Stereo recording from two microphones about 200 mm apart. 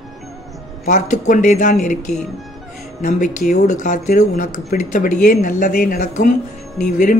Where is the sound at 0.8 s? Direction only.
40° left (ahead or behind).